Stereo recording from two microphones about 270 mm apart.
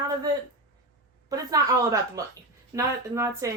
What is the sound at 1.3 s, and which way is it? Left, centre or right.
Speech, centre.